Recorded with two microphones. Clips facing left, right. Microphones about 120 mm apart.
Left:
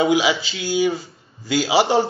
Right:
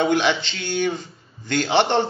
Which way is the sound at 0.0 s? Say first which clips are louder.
Left 2 dB; 5° left (ahead or behind).